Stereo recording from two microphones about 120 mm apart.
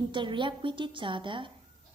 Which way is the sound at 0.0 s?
40° right (ahead or behind).